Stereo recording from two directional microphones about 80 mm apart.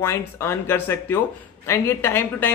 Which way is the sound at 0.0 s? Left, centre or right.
Left.